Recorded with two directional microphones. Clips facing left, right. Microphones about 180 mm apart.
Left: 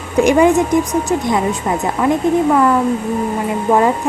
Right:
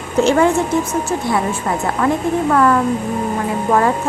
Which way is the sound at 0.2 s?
15° left (ahead or behind).